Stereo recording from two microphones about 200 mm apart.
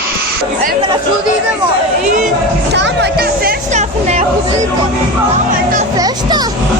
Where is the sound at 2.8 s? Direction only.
60° right (ahead or behind); by 4.2 s 35° right (ahead or behind).